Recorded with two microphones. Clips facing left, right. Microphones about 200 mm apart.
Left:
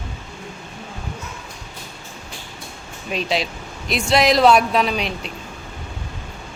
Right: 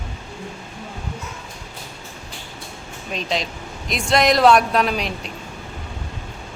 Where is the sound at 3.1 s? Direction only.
5° left (ahead or behind).